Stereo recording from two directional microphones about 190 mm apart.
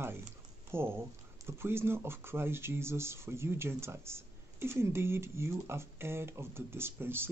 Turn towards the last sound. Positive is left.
turn(degrees=-10)  # may be behind; listen again after turning